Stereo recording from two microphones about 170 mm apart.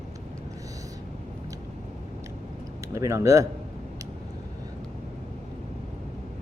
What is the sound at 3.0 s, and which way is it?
Speech, 20° right (ahead or behind).